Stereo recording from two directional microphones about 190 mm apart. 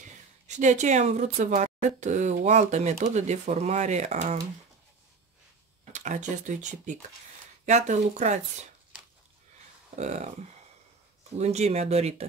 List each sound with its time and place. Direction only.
0.5 s speech: 40° right (ahead or behind)
5.9 s speech: 40° right (ahead or behind)
9.9 s speech: 40° right (ahead or behind)
11.3 s speech: 35° right (ahead or behind)